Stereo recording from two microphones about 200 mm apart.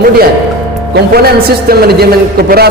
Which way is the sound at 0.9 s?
50° right (ahead or behind).